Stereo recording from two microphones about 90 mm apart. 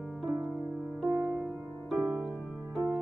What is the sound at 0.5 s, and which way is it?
Music, 5° right (ahead or behind).